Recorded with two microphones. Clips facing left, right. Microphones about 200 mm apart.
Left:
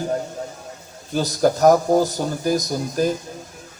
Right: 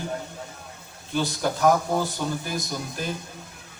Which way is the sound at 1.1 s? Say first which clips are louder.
Left 7 dB; 40° left (ahead or behind).